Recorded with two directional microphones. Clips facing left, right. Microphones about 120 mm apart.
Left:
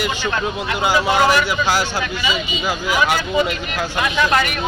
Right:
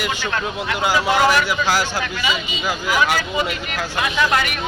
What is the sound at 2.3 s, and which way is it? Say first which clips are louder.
Speech: left 1 dB; 15° left (ahead or behind).